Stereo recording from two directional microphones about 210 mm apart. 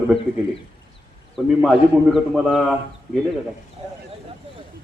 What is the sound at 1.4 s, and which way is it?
A man's voice, centre (ahead or behind).